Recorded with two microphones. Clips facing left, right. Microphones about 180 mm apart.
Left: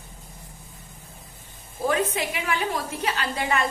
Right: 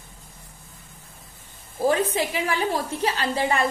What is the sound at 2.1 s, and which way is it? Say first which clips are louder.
A woman's voice: right 3 dB; 35° right (ahead or behind).